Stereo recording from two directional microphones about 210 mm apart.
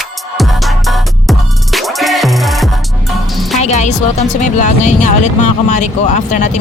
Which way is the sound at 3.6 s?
35° left (ahead or behind).